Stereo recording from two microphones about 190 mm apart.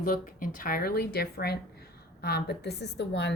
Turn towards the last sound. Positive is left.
turn(degrees=65)  # may be behind; listen again after turning